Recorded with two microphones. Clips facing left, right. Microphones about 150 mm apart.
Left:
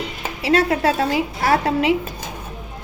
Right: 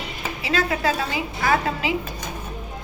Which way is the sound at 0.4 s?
65° left (ahead or behind).